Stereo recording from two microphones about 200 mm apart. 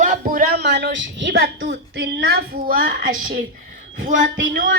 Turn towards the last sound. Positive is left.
turn(degrees=-70)  # may be behind; listen again after turning